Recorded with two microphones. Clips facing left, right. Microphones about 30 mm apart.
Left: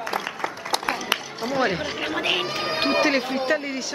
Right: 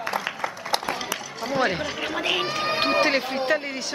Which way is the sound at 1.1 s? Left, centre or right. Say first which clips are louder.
Left 6 dB; left.